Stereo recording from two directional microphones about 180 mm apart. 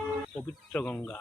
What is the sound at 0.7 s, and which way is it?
Speech, 10° left (ahead or behind).